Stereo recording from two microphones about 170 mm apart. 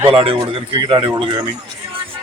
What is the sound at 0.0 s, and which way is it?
A man's voice, 30° right (ahead or behind).